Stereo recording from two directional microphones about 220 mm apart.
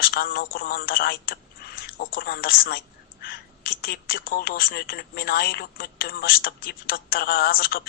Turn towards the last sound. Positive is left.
turn(degrees=45)  # may be behind; listen again after turning